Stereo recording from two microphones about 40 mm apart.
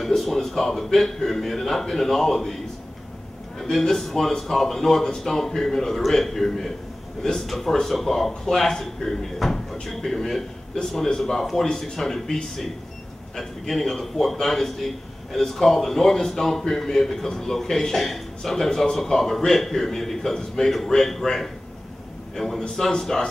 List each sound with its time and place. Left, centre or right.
0.1 s speech: centre
3.7 s a man's voice: centre